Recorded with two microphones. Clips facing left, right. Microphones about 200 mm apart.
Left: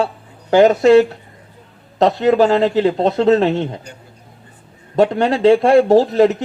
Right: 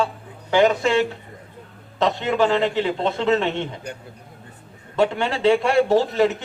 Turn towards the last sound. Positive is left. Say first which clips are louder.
# left 6 dB
turn(degrees=35)  # may be behind; listen again after turning